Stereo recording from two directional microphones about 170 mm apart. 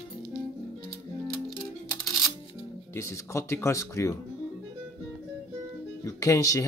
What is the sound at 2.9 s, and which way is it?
Speech, 15° left (ahead or behind).